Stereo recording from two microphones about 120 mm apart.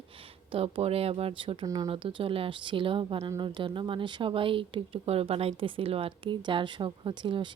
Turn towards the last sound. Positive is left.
turn(degrees=-45)  # may be behind; listen again after turning